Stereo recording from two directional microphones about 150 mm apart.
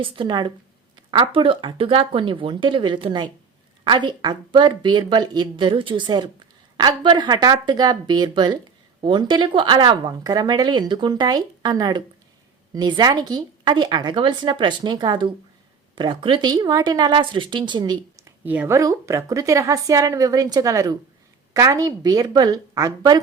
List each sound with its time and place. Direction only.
0.0 s speech: 35° right (ahead or behind)